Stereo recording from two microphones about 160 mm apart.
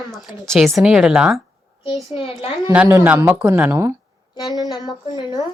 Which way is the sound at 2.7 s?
10° right (ahead or behind).